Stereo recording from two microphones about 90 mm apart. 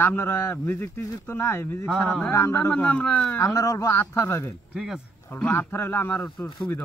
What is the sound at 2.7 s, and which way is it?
Speech, 15° left (ahead or behind).